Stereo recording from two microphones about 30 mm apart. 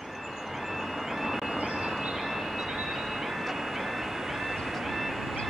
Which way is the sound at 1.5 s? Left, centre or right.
Right.